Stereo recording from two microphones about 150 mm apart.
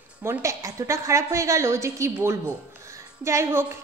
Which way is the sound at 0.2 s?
20° right (ahead or behind).